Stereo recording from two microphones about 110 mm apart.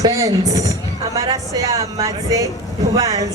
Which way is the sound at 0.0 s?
35° right (ahead or behind).